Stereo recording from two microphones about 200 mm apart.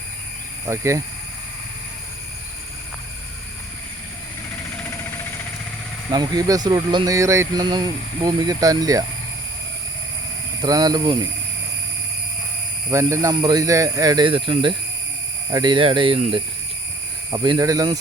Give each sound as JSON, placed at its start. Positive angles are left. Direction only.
{"t": 0.7, "sound": "speech", "side_deg": -15}
{"t": 6.1, "sound": "speech", "side_deg": -20}
{"t": 10.6, "sound": "speech", "side_deg": -20}
{"t": 12.9, "sound": "speech", "side_deg": -15}